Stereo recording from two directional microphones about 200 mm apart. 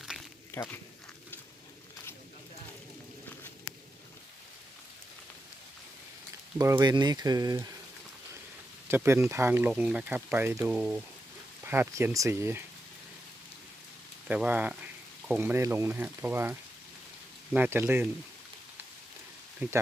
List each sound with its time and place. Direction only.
0.5 s speech: 10° left (ahead or behind)
6.6 s speech: 15° right (ahead or behind)
8.9 s speech: 10° right (ahead or behind)
14.3 s speech: 10° right (ahead or behind)
19.6 s speech: 10° right (ahead or behind)